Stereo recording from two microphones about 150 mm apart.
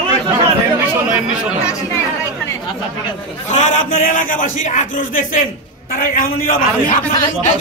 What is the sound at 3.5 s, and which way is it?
A man's voice, 60° left (ahead or behind).